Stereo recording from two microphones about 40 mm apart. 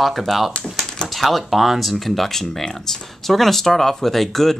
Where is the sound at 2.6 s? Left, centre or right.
Centre.